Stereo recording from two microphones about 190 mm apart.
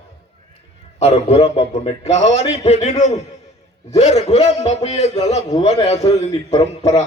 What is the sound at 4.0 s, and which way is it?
A man's voice, 35° left (ahead or behind).